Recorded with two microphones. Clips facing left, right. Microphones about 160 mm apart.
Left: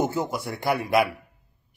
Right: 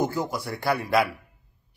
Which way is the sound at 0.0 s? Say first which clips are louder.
Left 1 dB; 20° left (ahead or behind).